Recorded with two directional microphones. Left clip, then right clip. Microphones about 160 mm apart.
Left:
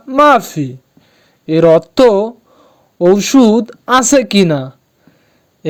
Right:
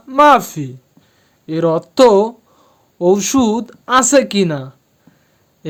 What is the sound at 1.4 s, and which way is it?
Speech, 30° left (ahead or behind).